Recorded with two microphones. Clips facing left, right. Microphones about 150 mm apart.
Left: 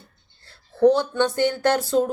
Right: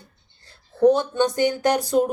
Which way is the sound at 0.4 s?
20° right (ahead or behind).